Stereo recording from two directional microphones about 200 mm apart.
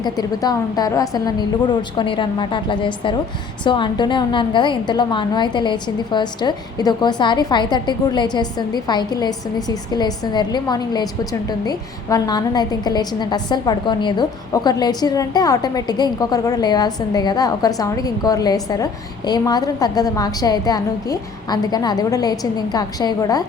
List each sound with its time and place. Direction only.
0.0 s a woman's voice: 20° left (ahead or behind)